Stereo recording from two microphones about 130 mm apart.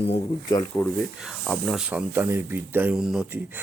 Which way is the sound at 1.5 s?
Centre (ahead or behind).